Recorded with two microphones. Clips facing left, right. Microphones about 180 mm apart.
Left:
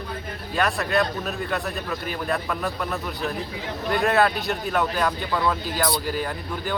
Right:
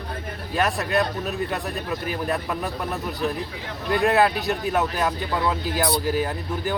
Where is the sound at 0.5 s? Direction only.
20° right (ahead or behind).